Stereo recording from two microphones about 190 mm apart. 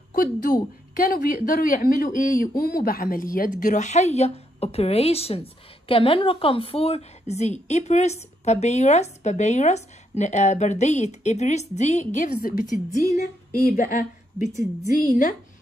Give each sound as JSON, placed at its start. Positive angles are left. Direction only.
{"t": 0.1, "sound": "a woman's voice", "side_deg": 45}